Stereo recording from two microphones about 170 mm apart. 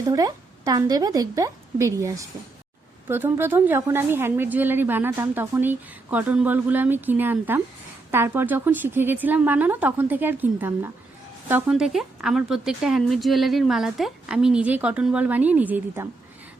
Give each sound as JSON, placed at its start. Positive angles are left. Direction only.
{"t": 0.1, "sound": "a woman's voice", "side_deg": -20}